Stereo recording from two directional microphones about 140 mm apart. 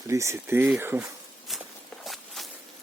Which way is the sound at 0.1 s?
20° right (ahead or behind).